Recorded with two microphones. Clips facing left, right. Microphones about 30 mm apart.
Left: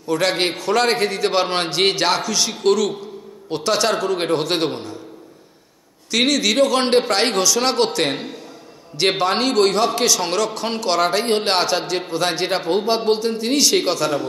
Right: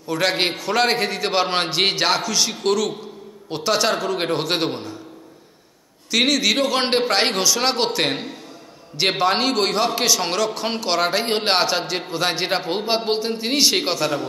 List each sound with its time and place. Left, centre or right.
0.1 s a man's voice: centre
6.1 s a man's voice: centre